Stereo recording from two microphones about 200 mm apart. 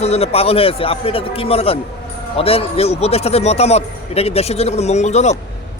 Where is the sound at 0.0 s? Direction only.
30° left (ahead or behind).